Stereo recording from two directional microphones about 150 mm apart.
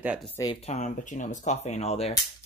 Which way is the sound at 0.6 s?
50° left (ahead or behind).